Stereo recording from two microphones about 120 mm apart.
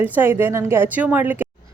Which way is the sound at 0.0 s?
15° right (ahead or behind).